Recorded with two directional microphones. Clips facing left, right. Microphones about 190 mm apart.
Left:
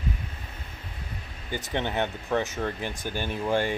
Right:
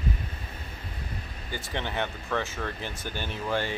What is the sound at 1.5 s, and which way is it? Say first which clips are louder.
Speech: left 4 dB; 20° left (ahead or behind).